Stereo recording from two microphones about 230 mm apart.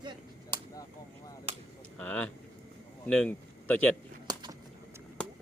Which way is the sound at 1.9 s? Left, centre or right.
Centre.